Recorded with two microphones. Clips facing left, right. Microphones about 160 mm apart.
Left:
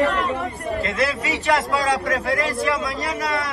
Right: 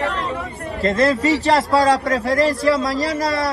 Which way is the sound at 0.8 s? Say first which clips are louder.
Right 10 dB; 35° right (ahead or behind).